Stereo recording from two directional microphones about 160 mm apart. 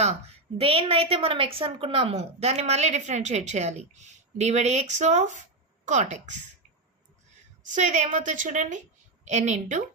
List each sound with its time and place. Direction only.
0.0 s a woman's voice: 40° right (ahead or behind)
7.6 s a woman's voice: 50° right (ahead or behind)